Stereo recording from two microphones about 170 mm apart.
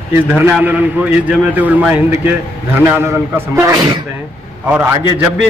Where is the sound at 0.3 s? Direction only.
10° right (ahead or behind).